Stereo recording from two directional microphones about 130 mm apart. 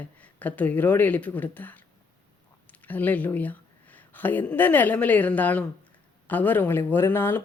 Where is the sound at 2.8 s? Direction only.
15° left (ahead or behind).